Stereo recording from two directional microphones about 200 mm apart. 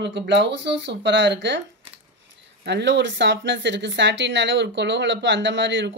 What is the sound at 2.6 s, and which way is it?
Speech, 60° right (ahead or behind).